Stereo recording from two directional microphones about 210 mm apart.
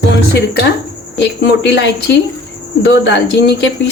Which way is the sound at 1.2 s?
55° left (ahead or behind).